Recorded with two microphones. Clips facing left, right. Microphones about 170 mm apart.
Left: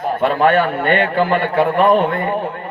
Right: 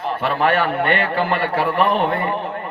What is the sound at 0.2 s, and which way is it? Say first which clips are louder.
A man's voice: left 5 dB; 50° left (ahead or behind).